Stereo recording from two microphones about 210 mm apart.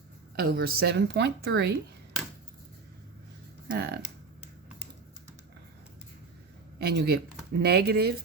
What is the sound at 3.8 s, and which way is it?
Speech, 50° right (ahead or behind).